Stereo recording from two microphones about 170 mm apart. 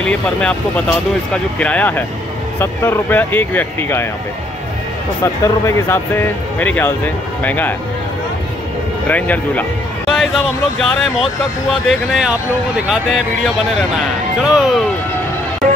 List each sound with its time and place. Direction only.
0.0 s speech: 5° left (ahead or behind)
5.2 s speech: 15° left (ahead or behind)
9.0 s speech: 10° left (ahead or behind)
14.4 s speech: 5° right (ahead or behind)